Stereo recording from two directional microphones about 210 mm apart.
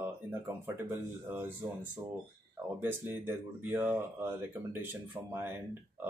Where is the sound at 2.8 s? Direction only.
10° right (ahead or behind).